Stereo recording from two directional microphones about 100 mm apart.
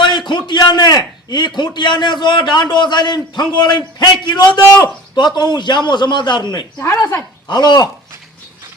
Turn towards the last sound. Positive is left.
turn(degrees=45)  # may be behind; listen again after turning